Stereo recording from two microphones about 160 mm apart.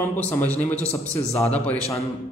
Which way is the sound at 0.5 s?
10° left (ahead or behind).